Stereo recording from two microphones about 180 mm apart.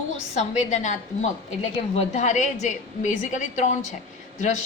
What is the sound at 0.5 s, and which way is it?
A woman's voice, 40° left (ahead or behind).